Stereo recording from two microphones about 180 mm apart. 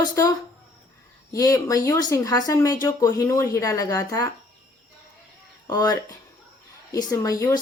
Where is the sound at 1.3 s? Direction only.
20° left (ahead or behind).